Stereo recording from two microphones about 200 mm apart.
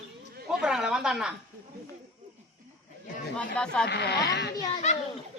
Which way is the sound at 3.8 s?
55° left (ahead or behind).